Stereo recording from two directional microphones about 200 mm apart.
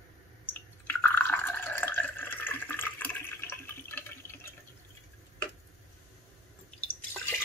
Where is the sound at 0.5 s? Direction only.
10° left (ahead or behind).